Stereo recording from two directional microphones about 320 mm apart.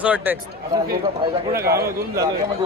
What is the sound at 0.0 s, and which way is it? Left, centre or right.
Speech, centre.